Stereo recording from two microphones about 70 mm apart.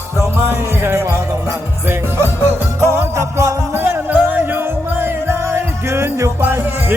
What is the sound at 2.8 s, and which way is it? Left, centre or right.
Music, right.